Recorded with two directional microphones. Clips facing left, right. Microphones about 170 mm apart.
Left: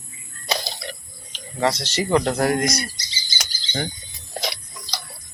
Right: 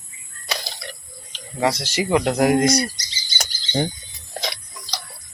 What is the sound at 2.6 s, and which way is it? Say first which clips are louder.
Speech: right 6 dB; 30° right (ahead or behind).